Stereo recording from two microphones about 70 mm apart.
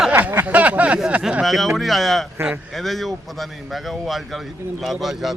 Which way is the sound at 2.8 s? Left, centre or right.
Centre.